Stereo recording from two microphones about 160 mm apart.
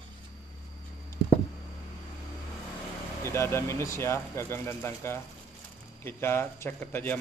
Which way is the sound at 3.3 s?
15° left (ahead or behind).